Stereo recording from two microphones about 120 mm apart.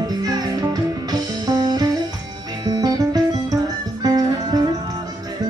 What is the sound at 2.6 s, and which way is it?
Guitar, 35° right (ahead or behind).